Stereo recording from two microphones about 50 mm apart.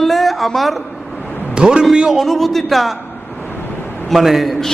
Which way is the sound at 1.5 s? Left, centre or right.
Centre.